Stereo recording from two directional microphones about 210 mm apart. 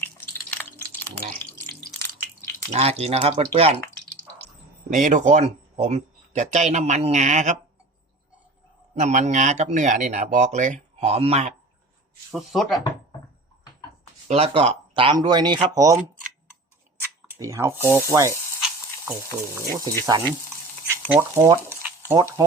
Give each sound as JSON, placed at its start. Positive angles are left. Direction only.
{"t": 0.9, "sound": "a sound", "side_deg": 10}
{"t": 1.7, "sound": "drip", "side_deg": 10}
{"t": 2.7, "sound": "speech", "side_deg": -30}
{"t": 4.9, "sound": "speech", "side_deg": -35}
{"t": 9.0, "sound": "speech", "side_deg": -35}
{"t": 12.3, "sound": "speech", "side_deg": 0}
{"t": 14.3, "sound": "speech", "side_deg": -30}
{"t": 15.6, "sound": "rub", "side_deg": -15}
{"t": 17.2, "sound": "speech", "side_deg": -15}
{"t": 17.8, "sound": "rub", "side_deg": -15}
{"t": 19.5, "sound": "rub", "side_deg": -15}
{"t": 20.1, "sound": "speech", "side_deg": -25}
{"t": 22.1, "sound": "rub", "side_deg": -15}